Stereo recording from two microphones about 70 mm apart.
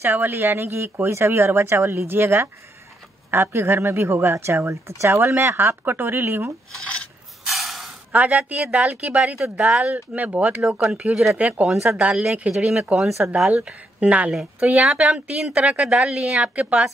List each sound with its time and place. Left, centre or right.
0.0 s speech: right
7.4 s a sound: centre
8.1 s speech: right
10.6 s speech: centre
11.7 s speech: centre